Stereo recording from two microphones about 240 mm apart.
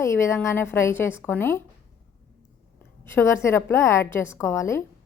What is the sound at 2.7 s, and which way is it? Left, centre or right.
A woman's voice, centre.